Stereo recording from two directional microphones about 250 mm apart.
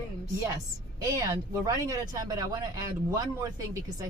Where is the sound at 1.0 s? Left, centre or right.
Centre.